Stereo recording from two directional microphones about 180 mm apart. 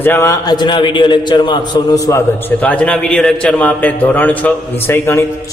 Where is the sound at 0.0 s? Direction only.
15° left (ahead or behind).